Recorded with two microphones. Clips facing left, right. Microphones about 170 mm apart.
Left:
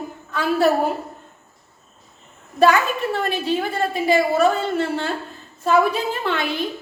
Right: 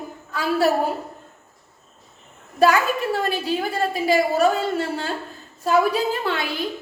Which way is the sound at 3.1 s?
35° right (ahead or behind).